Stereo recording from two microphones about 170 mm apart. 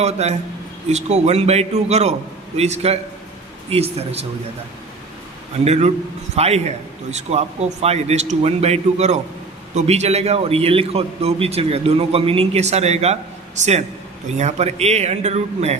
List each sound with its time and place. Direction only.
0.0 s a man's voice: 40° right (ahead or behind)
5.6 s a man's voice: 40° right (ahead or behind)